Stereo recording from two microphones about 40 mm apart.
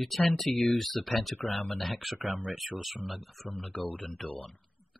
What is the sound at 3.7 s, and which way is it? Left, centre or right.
Speech, left.